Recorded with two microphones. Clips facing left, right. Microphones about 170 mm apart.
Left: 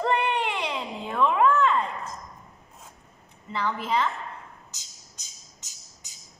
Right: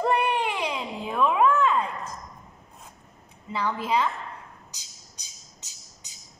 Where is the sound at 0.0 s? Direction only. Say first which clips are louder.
Right 1 dB; 10° right (ahead or behind).